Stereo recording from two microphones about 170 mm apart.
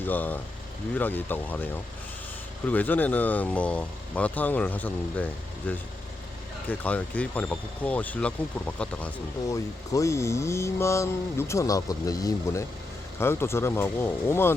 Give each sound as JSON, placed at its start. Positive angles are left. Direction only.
{"t": 0.0, "sound": "speech", "side_deg": 10}
{"t": 9.5, "sound": "speech", "side_deg": 20}